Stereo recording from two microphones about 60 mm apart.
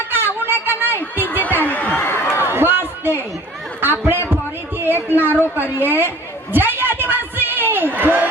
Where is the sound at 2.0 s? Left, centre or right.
Left.